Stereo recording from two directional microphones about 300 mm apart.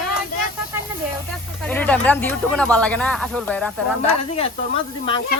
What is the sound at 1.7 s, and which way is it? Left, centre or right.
Speech, centre.